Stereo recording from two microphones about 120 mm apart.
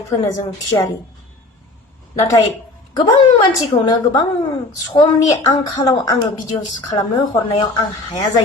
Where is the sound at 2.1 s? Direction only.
25° left (ahead or behind).